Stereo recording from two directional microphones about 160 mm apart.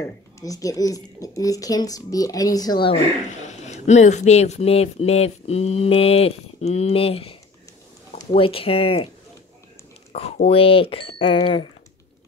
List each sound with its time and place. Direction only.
0.4 s speech: 20° left (ahead or behind)
3.3 s speech: 45° left (ahead or behind)
8.4 s speech: 35° left (ahead or behind)
10.3 s speech: 40° left (ahead or behind)